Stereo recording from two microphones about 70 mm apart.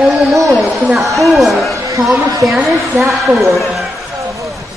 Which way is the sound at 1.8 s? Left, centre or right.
Right.